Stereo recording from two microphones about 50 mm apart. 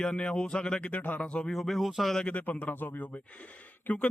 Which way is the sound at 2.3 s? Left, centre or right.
Left.